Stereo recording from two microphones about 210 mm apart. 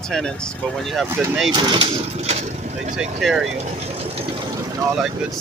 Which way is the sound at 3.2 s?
Centre (ahead or behind).